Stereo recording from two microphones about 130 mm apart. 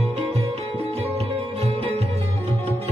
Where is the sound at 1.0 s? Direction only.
50° right (ahead or behind).